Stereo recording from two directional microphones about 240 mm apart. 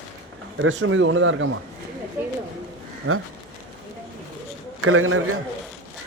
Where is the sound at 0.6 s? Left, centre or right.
Right.